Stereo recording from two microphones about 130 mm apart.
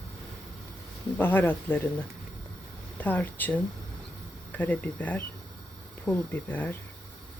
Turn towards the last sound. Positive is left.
turn(degrees=15)  # may be behind; listen again after turning